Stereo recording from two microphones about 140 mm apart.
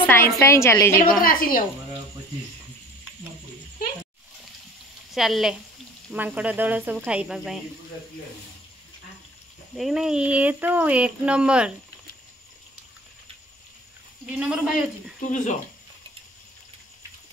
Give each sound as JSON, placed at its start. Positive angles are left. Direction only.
{"t": 0.0, "sound": "a woman's voice", "side_deg": 15}
{"t": 1.2, "sound": "a woman's voice", "side_deg": 90}
{"t": 5.1, "sound": "speech", "side_deg": 0}
{"t": 9.8, "sound": "speech", "side_deg": 0}
{"t": 14.3, "sound": "speech", "side_deg": -5}
{"t": 15.2, "sound": "speech", "side_deg": 60}